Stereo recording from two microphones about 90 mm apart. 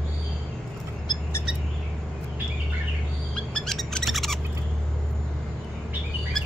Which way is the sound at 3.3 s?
5° left (ahead or behind).